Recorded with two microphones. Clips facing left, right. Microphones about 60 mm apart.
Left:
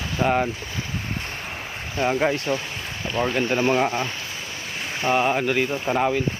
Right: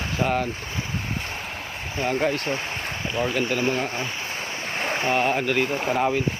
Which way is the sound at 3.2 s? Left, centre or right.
Centre.